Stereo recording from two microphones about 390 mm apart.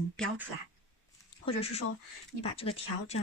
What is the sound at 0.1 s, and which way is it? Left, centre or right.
Speech, centre.